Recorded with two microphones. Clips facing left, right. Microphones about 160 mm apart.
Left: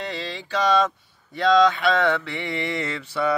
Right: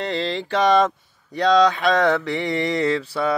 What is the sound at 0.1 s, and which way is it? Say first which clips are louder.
Mantra: right 6 dB; 50° right (ahead or behind).